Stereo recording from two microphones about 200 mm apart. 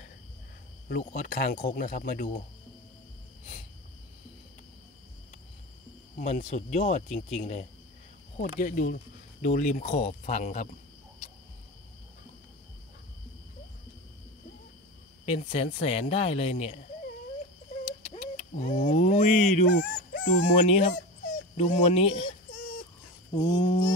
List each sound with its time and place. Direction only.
0.8 s speech: 50° left (ahead or behind)
6.1 s speech: 40° left (ahead or behind)
15.2 s speech: 30° left (ahead or behind)
18.0 s speech: 35° left (ahead or behind)
23.3 s mantra: 30° left (ahead or behind)